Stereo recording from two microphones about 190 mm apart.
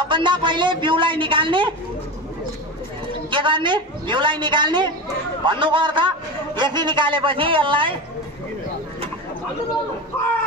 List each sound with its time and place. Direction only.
0.0 s a man's voice: 25° right (ahead or behind)
3.3 s a man's voice: 25° right (ahead or behind)